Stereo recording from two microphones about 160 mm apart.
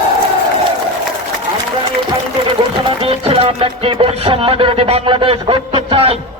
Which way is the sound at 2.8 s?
35° right (ahead or behind).